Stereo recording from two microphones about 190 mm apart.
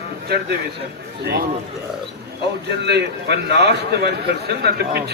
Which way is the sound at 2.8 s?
60° right (ahead or behind).